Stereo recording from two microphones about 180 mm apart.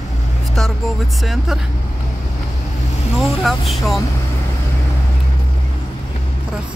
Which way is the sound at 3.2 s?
Centre (ahead or behind).